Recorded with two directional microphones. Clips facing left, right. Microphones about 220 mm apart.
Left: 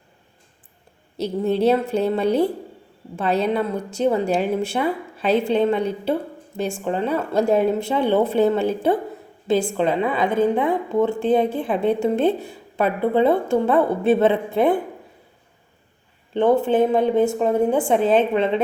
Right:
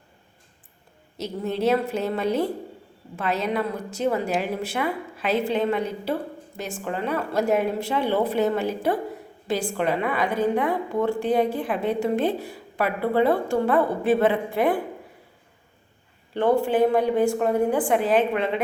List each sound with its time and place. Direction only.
1.2 s a woman's voice: 30° left (ahead or behind)
6.8 s a woman's voice: 30° left (ahead or behind)
16.3 s a woman's voice: 20° left (ahead or behind)